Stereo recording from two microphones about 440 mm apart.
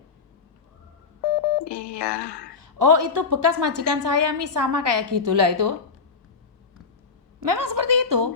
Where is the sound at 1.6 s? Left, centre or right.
Left.